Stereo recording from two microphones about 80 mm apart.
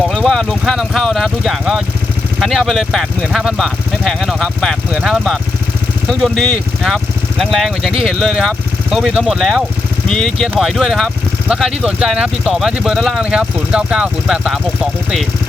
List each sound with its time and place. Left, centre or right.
0.1 s vehicle: centre
0.6 s speech: centre
4.9 s speech: centre